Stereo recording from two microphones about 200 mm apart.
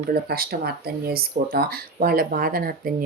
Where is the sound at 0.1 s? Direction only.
50° right (ahead or behind).